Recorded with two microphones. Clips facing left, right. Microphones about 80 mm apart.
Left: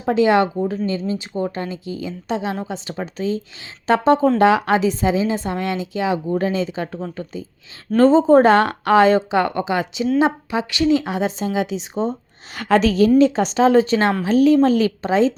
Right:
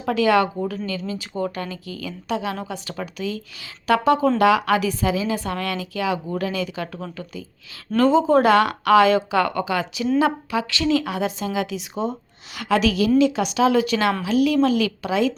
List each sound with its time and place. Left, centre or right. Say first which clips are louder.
0.0 s speech: left 3 dB; left
12.5 s speech: left 4 dB; left